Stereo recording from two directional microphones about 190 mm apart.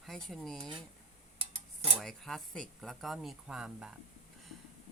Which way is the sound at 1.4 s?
30° right (ahead or behind).